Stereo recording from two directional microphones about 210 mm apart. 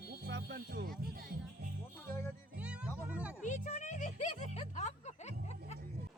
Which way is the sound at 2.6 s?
5° right (ahead or behind).